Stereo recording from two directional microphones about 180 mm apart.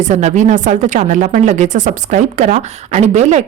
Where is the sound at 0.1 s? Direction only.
40° right (ahead or behind).